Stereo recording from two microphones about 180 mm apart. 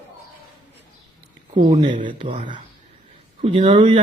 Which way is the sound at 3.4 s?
35° right (ahead or behind).